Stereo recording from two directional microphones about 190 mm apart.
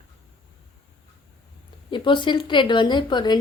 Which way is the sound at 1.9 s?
25° left (ahead or behind).